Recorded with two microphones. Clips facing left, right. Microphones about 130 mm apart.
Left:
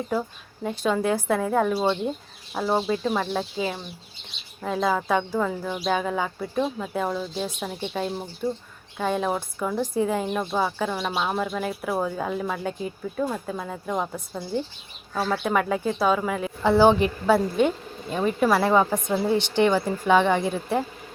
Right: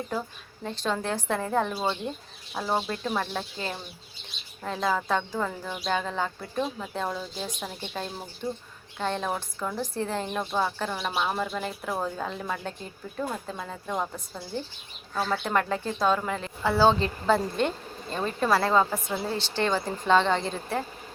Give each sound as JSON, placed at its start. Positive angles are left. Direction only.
{"t": 0.1, "sound": "speech", "side_deg": 10}
{"t": 16.6, "sound": "speech", "side_deg": 15}